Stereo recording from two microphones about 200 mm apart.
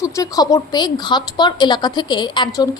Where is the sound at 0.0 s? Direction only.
15° left (ahead or behind).